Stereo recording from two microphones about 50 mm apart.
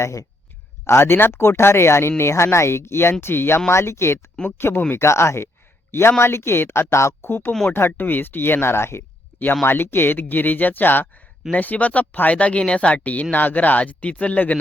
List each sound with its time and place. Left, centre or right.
0.9 s speech: left
3.7 s speech: left
4.9 s speech: left
5.9 s speech: left
7.2 s speech: left